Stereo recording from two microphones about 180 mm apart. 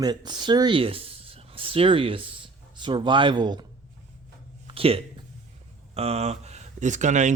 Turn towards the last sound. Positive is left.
turn(degrees=-40)  # may be behind; listen again after turning